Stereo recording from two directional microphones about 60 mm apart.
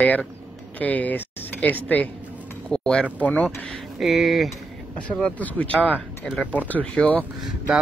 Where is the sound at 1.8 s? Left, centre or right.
Left.